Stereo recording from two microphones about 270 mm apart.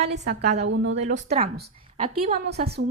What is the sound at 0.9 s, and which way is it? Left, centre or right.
A woman's voice, right.